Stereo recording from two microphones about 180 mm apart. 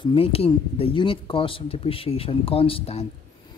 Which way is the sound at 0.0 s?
30° left (ahead or behind).